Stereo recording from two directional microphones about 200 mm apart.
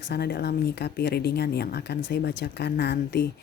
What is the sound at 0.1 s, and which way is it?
Speech, 55° left (ahead or behind).